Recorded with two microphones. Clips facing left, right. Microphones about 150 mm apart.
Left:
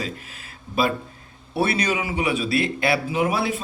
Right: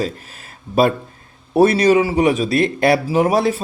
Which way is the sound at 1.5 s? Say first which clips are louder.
Right 11 dB; 40° right (ahead or behind).